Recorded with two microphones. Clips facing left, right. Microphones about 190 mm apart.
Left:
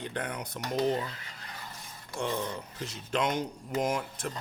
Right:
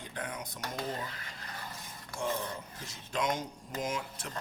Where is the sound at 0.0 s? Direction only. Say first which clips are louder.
Left 5 dB; 70° left (ahead or behind).